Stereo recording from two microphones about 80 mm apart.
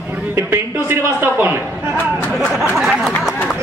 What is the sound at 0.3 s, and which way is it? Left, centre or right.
A man's voice, right.